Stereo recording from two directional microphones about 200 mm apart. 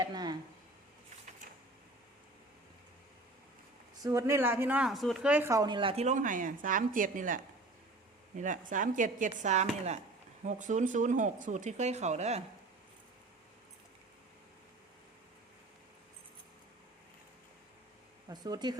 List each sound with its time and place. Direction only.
0.0 s a sound: 20° right (ahead or behind)
4.0 s speech: 15° right (ahead or behind); by 12.4 s 35° right (ahead or behind)
18.3 s speech: 20° right (ahead or behind)